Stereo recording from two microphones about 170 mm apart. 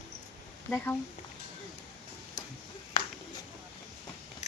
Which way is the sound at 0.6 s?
10° left (ahead or behind).